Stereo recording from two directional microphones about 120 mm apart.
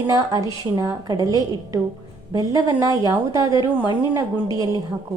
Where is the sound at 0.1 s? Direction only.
30° right (ahead or behind).